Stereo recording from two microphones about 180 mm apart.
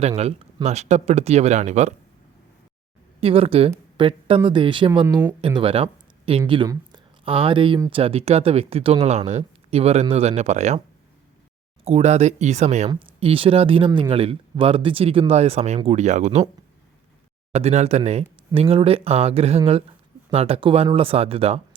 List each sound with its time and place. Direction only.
0.2 s speech: 35° right (ahead or behind)
3.2 s speech: 30° right (ahead or behind)
11.9 s speech: 35° right (ahead or behind)
17.5 s speech: 35° right (ahead or behind)